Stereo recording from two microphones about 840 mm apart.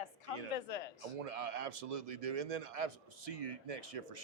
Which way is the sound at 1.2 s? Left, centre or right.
Right.